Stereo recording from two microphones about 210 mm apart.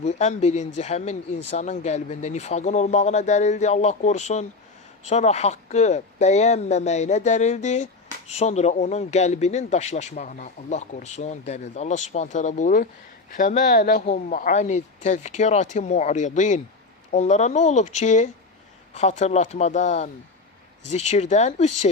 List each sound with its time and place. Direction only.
0.0 s speech: 30° left (ahead or behind)